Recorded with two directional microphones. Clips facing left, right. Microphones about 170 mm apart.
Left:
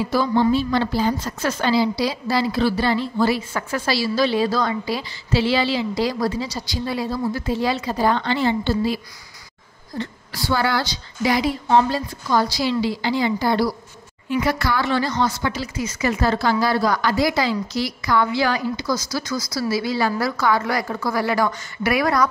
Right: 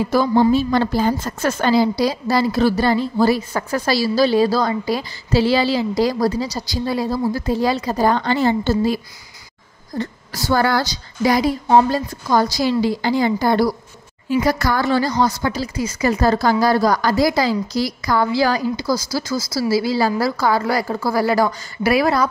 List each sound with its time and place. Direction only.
0.0 s a woman's voice: 45° right (ahead or behind); by 22.3 s 30° right (ahead or behind)